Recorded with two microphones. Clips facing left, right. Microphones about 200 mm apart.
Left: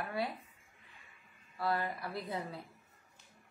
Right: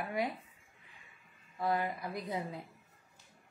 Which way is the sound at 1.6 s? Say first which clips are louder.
Right 2 dB; 20° right (ahead or behind).